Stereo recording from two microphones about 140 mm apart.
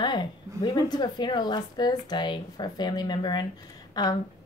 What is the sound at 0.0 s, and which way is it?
A woman's voice, 30° left (ahead or behind).